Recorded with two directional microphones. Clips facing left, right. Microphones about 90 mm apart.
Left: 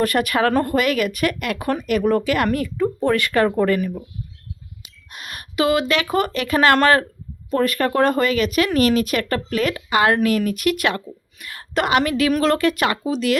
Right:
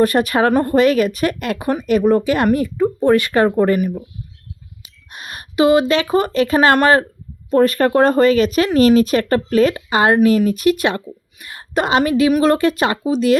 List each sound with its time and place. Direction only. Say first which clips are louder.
0.0 s a woman's voice: right 4 dB; 25° right (ahead or behind)
5.1 s a woman's voice: right 4 dB; 25° right (ahead or behind)